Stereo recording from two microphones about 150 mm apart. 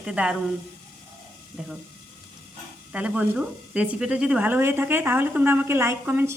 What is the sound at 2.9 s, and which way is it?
Speech, 5° right (ahead or behind).